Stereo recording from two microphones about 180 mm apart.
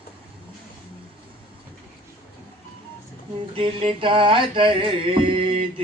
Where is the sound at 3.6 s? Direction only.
30° right (ahead or behind).